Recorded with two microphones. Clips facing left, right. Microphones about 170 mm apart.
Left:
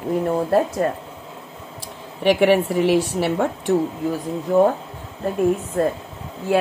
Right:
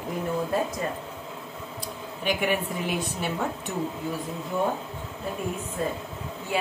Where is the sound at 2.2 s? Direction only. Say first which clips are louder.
Left 11 dB; 75° left (ahead or behind).